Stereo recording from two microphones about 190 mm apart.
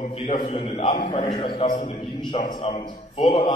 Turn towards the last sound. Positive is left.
turn(degrees=30)  # may be behind; listen again after turning